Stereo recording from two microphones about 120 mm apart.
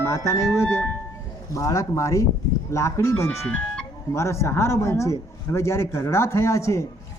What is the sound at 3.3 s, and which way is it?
Speech, 5° left (ahead or behind).